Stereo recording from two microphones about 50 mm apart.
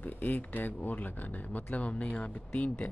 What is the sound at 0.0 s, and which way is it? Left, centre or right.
Speech, left.